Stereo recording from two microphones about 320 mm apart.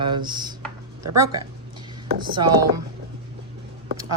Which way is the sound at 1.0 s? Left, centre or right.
Right.